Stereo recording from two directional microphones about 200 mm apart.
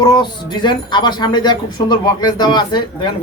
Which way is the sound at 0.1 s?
20° left (ahead or behind).